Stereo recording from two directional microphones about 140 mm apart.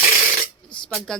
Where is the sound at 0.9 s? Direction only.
5° left (ahead or behind).